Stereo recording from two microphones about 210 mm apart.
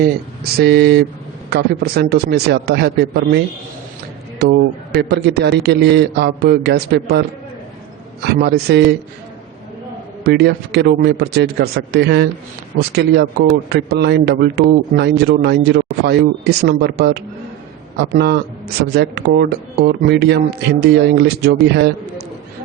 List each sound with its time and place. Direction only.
0.6 s a man's voice: 50° right (ahead or behind)
10.2 s a man's voice: 50° right (ahead or behind)